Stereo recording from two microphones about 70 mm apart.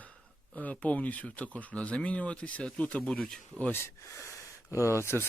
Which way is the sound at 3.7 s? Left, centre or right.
Left.